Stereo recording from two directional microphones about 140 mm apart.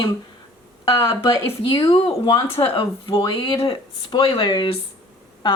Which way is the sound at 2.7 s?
40° left (ahead or behind).